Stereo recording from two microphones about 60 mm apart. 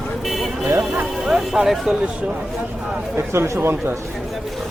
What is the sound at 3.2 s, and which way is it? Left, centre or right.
Speech, right.